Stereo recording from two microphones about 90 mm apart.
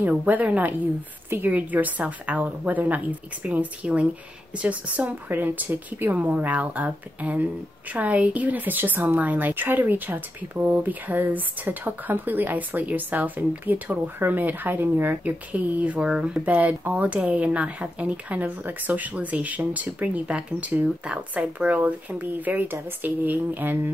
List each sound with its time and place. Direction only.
0.1 s speech: 15° right (ahead or behind)